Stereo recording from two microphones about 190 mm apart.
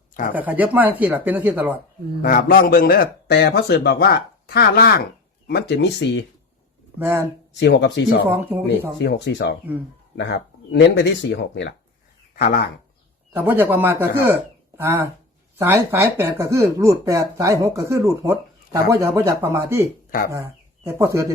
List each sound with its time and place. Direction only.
0.1 s speech: 45° left (ahead or behind)
0.3 s speech: 10° right (ahead or behind)
2.2 s a man's voice: 50° left (ahead or behind); by 6.2 s 65° left (ahead or behind)
7.5 s speech: 70° left (ahead or behind)
8.3 s speech: 10° right (ahead or behind)
9.0 s speech: 65° left (ahead or behind)
12.4 s a man's voice: 50° left (ahead or behind)
13.3 s speech: 10° right (ahead or behind)
20.1 s speech: 50° left (ahead or behind)
20.3 s speech: 15° right (ahead or behind)